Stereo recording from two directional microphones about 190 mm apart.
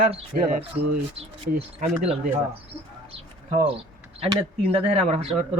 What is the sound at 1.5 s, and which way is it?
Speech, 30° right (ahead or behind).